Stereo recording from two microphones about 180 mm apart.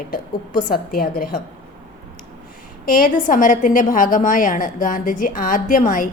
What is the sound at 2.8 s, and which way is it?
A woman's voice, 50° left (ahead or behind).